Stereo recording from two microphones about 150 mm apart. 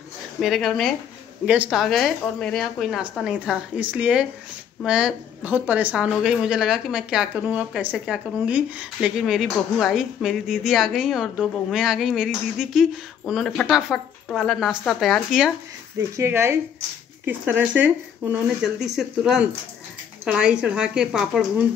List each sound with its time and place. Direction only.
0.4 s a woman's voice: centre (ahead or behind)
1.4 s a woman's voice: 10° right (ahead or behind)
16.0 s a woman's voice: 20° right (ahead or behind)